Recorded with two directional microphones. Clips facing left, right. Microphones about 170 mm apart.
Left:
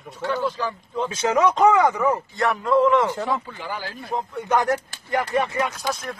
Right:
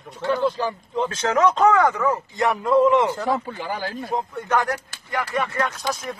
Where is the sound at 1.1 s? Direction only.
10° left (ahead or behind).